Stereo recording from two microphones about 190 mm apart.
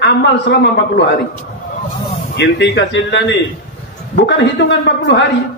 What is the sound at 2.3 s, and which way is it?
A man's voice, 65° left (ahead or behind).